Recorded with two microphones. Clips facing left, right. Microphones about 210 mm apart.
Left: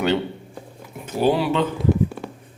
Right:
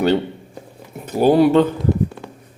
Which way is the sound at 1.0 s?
40° right (ahead or behind).